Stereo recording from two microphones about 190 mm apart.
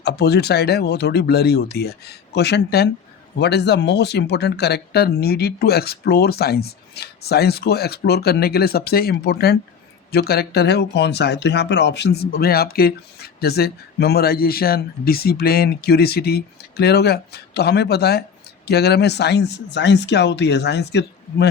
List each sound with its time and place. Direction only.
0.0 s speech: 60° left (ahead or behind)